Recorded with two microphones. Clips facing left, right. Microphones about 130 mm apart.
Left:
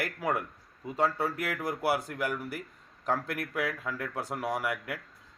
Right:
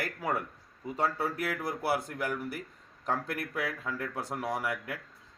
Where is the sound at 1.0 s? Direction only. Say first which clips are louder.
Left 1 dB; 20° left (ahead or behind).